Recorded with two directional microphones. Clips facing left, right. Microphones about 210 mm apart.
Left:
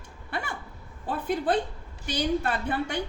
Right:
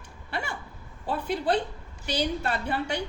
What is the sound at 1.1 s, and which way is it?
Speech, 50° left (ahead or behind).